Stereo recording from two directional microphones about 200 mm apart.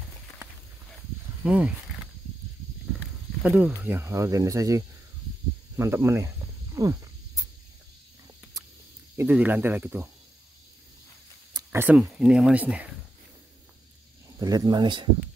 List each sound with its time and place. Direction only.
1.4 s speech: 5° right (ahead or behind)
3.4 s speech: 5° right (ahead or behind)
5.8 s cricket: 15° right (ahead or behind)
8.6 s a sound: 20° right (ahead or behind)
9.1 s speech: 10° right (ahead or behind)
11.5 s a sound: 10° right (ahead or behind)
12.0 s speech: 5° right (ahead or behind)
14.4 s speech: 20° right (ahead or behind)